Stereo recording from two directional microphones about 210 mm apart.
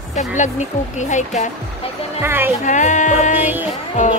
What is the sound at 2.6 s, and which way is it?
Speech, 35° left (ahead or behind).